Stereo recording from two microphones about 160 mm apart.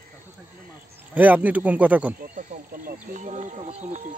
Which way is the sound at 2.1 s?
60° right (ahead or behind).